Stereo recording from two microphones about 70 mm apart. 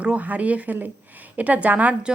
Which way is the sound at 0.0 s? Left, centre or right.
Centre.